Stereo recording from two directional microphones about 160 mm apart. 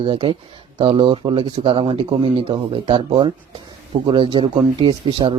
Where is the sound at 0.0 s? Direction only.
35° right (ahead or behind).